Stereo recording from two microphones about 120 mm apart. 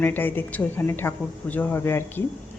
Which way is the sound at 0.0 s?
15° left (ahead or behind).